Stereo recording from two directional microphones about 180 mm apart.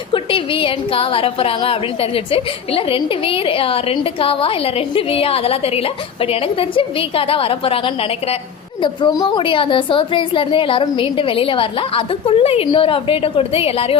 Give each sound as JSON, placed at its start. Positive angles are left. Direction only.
{"t": 0.1, "sound": "a woman's voice", "side_deg": 30}